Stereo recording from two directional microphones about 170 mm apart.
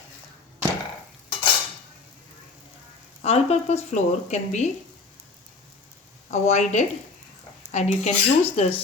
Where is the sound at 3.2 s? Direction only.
40° left (ahead or behind).